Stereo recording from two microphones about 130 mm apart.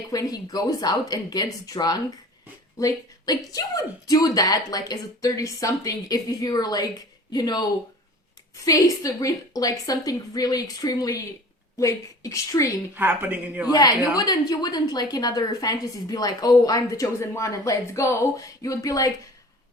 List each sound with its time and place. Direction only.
0.1 s a woman's voice: 30° left (ahead or behind)
13.0 s speech: 15° right (ahead or behind)
13.7 s a woman's voice: 30° left (ahead or behind)